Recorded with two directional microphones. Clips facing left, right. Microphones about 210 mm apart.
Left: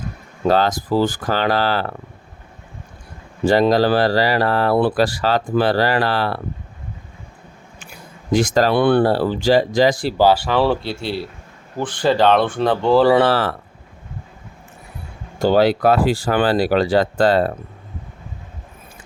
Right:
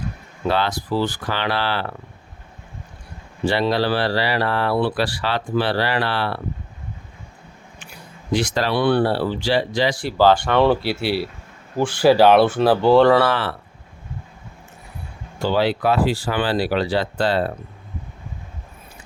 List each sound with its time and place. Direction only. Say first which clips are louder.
0.4 s speech: left 5 dB; 40° left (ahead or behind)
3.4 s speech: left 5 dB; 45° left (ahead or behind)
8.3 s speech: left 5 dB; 45° left (ahead or behind)
10.2 s speech: right 2 dB; 10° left (ahead or behind)
13.2 s speech: left 4 dB; 40° left (ahead or behind)
15.4 s speech: left 5 dB; 45° left (ahead or behind)